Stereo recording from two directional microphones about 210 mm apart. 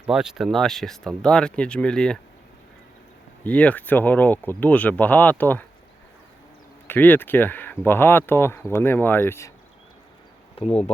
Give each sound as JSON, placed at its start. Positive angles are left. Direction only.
{"t": 0.0, "sound": "speech", "side_deg": -5}
{"t": 3.4, "sound": "speech", "side_deg": 5}
{"t": 6.8, "sound": "speech", "side_deg": 10}
{"t": 10.6, "sound": "speech", "side_deg": 30}